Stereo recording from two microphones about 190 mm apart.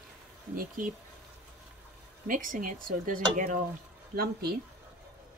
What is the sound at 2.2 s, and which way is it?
Speech, 45° right (ahead or behind).